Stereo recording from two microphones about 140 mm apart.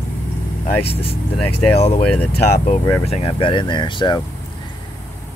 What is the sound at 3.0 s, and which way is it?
Speech, 45° left (ahead or behind).